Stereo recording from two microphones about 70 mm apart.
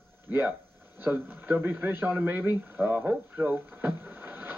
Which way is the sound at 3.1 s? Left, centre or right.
Right.